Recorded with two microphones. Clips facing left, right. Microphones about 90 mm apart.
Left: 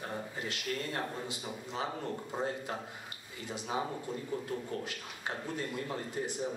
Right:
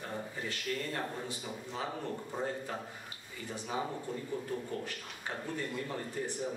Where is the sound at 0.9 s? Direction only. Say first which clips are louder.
Left 1 dB; 15° left (ahead or behind).